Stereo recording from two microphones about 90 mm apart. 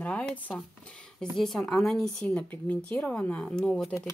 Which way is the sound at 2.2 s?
15° left (ahead or behind).